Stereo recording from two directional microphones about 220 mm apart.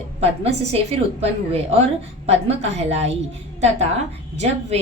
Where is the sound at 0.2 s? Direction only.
25° right (ahead or behind).